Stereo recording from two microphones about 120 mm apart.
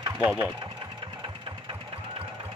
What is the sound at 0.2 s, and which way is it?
Speech, 15° right (ahead or behind).